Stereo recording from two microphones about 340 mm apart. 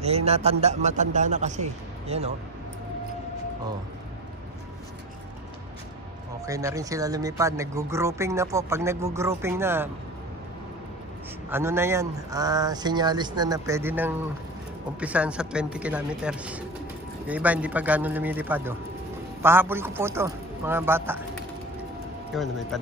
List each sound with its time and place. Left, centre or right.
0.0 s a man's voice: centre
6.4 s speech: centre
11.5 s speech: centre
22.3 s speech: centre